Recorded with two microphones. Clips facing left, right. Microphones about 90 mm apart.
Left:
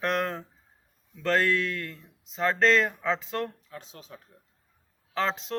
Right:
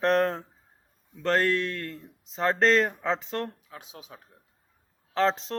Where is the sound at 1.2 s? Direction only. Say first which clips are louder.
Even; 30° right (ahead or behind).